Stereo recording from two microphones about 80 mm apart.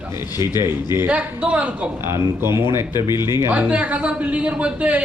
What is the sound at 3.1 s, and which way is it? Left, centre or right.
Speech, left.